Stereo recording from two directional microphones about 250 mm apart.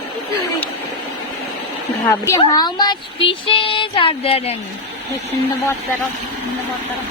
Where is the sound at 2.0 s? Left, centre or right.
Centre.